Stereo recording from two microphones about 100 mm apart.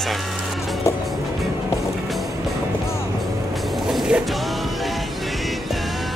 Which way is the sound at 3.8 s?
5° right (ahead or behind).